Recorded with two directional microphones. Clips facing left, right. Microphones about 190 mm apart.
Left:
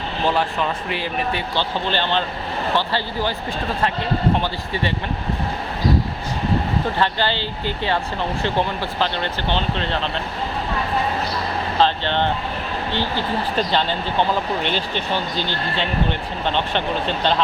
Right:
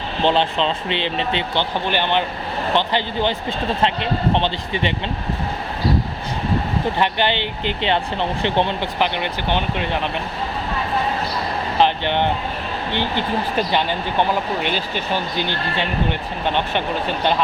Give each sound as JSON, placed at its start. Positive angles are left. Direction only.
{"t": 0.2, "sound": "speech", "side_deg": -25}
{"t": 7.0, "sound": "speech", "side_deg": -20}
{"t": 11.8, "sound": "speech", "side_deg": -15}